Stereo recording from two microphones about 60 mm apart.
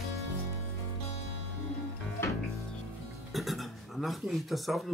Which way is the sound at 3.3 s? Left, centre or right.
Centre.